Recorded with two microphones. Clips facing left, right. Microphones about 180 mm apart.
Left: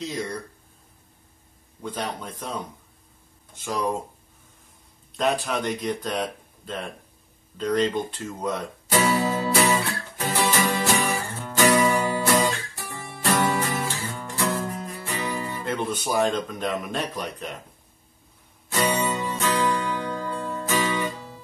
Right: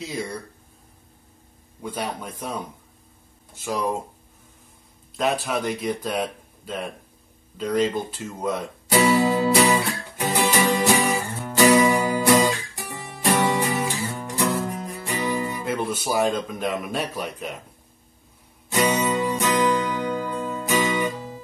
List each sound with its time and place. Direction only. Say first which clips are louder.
0.0 s speech: even; 10° right (ahead or behind)
1.8 s speech: right 1 dB; 10° right (ahead or behind)
3.6 s speech: right 1 dB; 5° right (ahead or behind)
5.1 s speech: right 1 dB; 5° right (ahead or behind)
9.4 s music: right 3 dB; 15° right (ahead or behind)
15.6 s speech: right 1 dB; 5° right (ahead or behind)
18.7 s music: right 3 dB; 15° right (ahead or behind)